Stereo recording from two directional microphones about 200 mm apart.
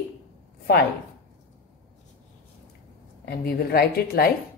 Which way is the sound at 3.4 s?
50° left (ahead or behind).